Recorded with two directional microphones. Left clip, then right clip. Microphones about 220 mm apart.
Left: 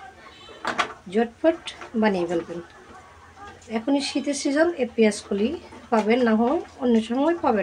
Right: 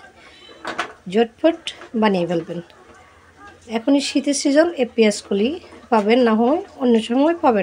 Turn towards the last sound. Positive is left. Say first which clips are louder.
# right 5 dB
turn(degrees=-40)  # may be behind; listen again after turning